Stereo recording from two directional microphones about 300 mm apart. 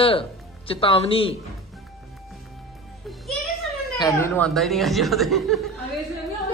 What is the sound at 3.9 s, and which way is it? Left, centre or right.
Speech, centre.